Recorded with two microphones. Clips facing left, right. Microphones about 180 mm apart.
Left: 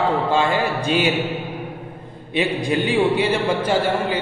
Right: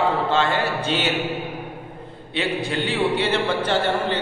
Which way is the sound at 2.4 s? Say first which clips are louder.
Left 4 dB; 15° left (ahead or behind).